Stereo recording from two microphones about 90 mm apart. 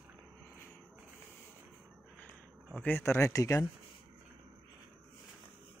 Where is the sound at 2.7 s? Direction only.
25° left (ahead or behind).